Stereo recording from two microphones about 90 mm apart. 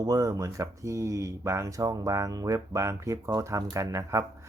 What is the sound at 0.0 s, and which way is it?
Speech, 40° right (ahead or behind).